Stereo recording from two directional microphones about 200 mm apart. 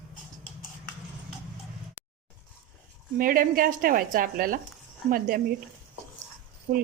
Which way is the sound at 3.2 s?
45° right (ahead or behind).